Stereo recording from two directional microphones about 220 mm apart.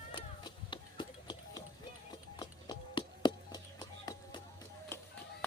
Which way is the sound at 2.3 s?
20° left (ahead or behind).